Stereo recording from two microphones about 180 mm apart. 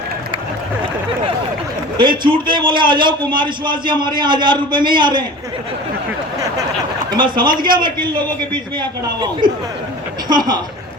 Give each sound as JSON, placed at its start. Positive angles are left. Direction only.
{"t": 2.0, "sound": "a man's voice", "side_deg": -25}
{"t": 7.1, "sound": "a man's voice", "side_deg": -25}